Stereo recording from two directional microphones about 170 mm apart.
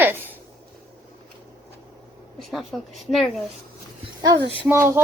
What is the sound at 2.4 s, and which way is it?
Speech, centre (ahead or behind).